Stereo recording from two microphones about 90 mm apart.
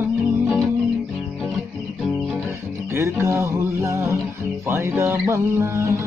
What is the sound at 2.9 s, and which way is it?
Music, 30° right (ahead or behind).